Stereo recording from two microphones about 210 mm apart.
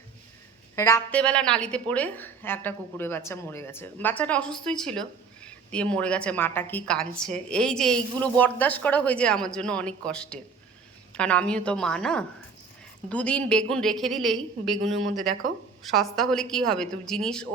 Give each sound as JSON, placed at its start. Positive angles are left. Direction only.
{"t": 0.8, "sound": "a woman's voice", "side_deg": 10}
{"t": 14.8, "sound": "speech", "side_deg": -65}
{"t": 15.8, "sound": "a woman's voice", "side_deg": 0}